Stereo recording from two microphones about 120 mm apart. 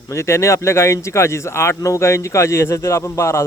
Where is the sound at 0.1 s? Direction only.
25° left (ahead or behind).